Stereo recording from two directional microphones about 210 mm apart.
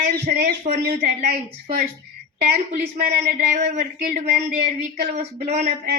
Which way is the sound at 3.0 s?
45° right (ahead or behind).